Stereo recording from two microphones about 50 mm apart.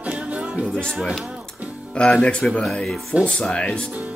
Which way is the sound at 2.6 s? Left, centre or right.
Centre.